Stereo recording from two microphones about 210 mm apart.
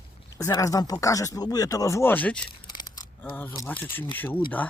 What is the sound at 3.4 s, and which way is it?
Speech, 10° left (ahead or behind).